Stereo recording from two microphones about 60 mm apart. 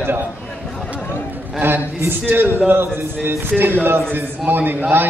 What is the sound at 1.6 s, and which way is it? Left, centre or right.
A man's voice, right.